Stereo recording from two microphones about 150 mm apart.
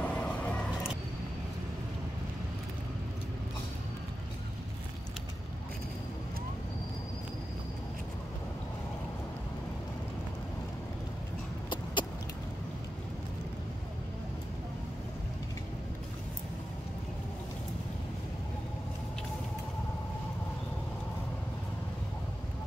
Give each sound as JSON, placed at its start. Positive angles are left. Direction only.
{"t": 0.0, "sound": "vehicle", "side_deg": 10}
{"t": 11.7, "sound": "vehicle", "side_deg": 30}